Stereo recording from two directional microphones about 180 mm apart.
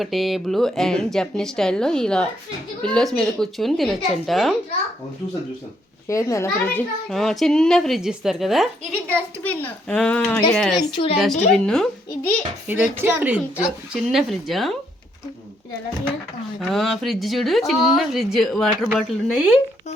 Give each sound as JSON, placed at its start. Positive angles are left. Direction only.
{"t": 0.0, "sound": "speech", "side_deg": 0}
{"t": 6.1, "sound": "a child's voice", "side_deg": 15}
{"t": 7.1, "sound": "a child's voice", "side_deg": 0}
{"t": 10.9, "sound": "speech", "side_deg": 30}
{"t": 11.5, "sound": "speech", "side_deg": 5}
{"t": 12.6, "sound": "speech", "side_deg": -10}
{"t": 16.6, "sound": "speech", "side_deg": 0}